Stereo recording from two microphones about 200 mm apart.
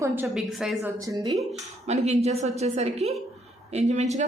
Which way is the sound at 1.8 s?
35° right (ahead or behind).